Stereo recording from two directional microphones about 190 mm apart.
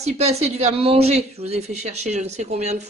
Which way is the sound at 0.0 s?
35° right (ahead or behind).